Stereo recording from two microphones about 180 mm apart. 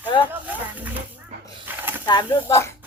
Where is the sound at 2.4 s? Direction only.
15° left (ahead or behind).